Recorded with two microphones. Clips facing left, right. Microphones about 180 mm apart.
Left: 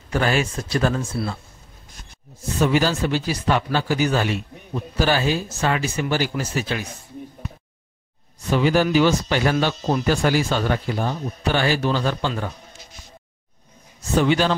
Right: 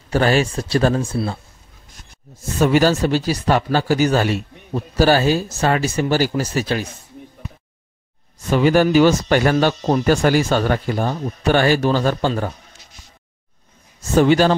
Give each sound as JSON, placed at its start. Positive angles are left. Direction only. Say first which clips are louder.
{"t": 0.1, "sound": "speech", "louder": "right 5 dB", "side_deg": -30}
{"t": 2.6, "sound": "speech", "louder": "right 5 dB", "side_deg": -50}
{"t": 8.5, "sound": "speech", "louder": "right 4 dB", "side_deg": -50}
{"t": 14.1, "sound": "speech", "louder": "right 5 dB", "side_deg": -45}